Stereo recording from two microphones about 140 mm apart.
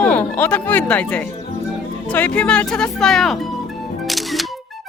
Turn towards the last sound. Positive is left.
turn(degrees=0)  # may be behind; listen again after turning